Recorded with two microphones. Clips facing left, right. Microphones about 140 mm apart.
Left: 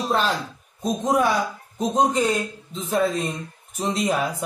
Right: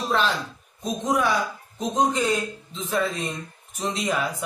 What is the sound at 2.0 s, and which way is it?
A man's voice, 45° left (ahead or behind).